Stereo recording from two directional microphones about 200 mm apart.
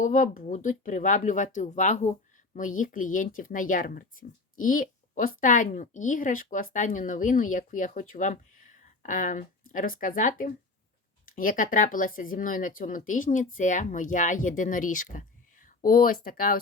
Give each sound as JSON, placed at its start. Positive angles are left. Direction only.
{"t": 0.0, "sound": "speech", "side_deg": 40}